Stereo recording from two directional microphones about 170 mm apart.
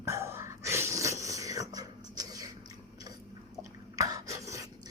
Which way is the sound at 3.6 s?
20° right (ahead or behind).